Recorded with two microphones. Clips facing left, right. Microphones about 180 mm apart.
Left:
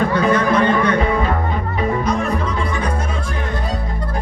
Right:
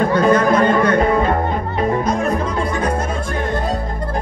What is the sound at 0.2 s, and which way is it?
Music, 45° right (ahead or behind).